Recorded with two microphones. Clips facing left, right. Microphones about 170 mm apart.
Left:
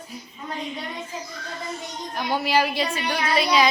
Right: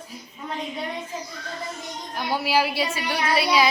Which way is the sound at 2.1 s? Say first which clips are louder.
Left 1 dB; 5° right (ahead or behind).